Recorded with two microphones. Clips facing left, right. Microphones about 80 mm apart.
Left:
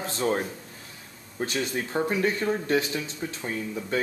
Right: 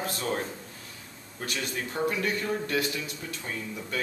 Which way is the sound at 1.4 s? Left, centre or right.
Left.